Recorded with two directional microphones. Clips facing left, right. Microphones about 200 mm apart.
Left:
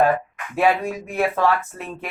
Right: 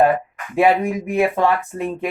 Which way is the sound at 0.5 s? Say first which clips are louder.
Right 4 dB; 15° right (ahead or behind).